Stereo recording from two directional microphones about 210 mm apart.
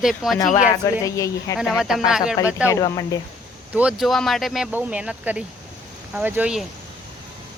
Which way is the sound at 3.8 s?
5° right (ahead or behind).